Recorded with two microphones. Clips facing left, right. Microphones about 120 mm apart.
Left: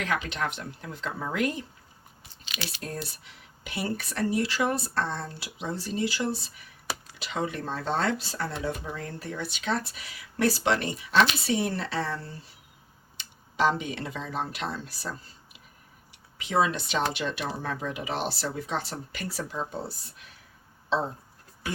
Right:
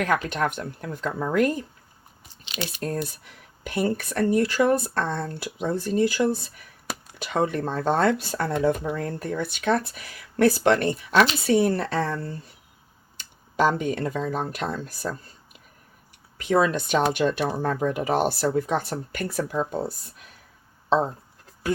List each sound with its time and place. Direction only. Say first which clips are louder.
0.0 s speech: right 6 dB; 50° right (ahead or behind)
16.4 s speech: right 4 dB; 50° right (ahead or behind)